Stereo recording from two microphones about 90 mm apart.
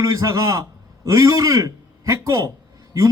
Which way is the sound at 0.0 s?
40° right (ahead or behind).